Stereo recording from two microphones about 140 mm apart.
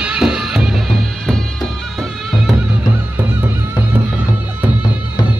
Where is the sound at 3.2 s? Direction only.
10° right (ahead or behind).